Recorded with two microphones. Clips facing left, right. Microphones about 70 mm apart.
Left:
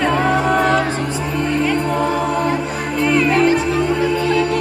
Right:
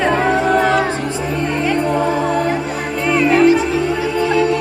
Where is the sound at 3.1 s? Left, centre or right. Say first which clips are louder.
Right 3 dB; centre.